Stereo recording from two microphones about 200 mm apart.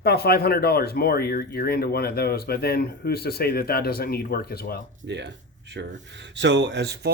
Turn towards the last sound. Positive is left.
turn(degrees=-60)  # may be behind; listen again after turning